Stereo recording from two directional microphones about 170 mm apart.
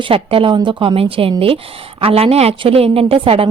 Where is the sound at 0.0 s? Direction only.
30° right (ahead or behind).